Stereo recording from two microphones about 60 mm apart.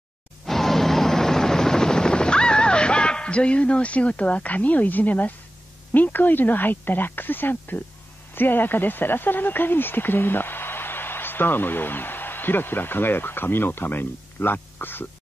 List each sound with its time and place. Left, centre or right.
0.5 s helicopter: centre; by 5.3 s left
5.9 s speech: left